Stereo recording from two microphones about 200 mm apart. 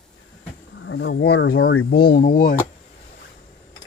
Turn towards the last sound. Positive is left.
turn(degrees=45)  # may be behind; listen again after turning